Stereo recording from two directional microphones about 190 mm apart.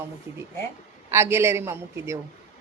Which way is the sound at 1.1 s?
15° right (ahead or behind).